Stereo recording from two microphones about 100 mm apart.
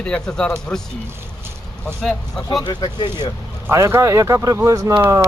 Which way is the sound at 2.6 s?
45° left (ahead or behind).